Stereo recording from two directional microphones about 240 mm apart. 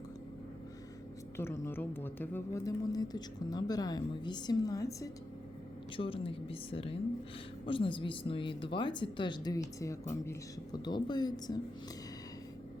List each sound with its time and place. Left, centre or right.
1.4 s a woman's voice: centre